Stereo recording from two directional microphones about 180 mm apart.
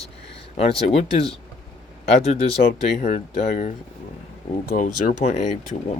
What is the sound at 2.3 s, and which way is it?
Speech, 35° left (ahead or behind).